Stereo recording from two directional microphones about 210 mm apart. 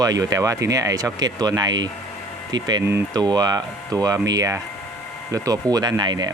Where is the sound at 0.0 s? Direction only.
15° right (ahead or behind).